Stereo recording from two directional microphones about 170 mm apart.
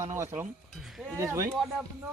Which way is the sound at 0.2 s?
15° right (ahead or behind).